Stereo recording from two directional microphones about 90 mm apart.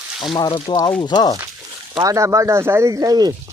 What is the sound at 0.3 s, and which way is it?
Speech, 60° left (ahead or behind).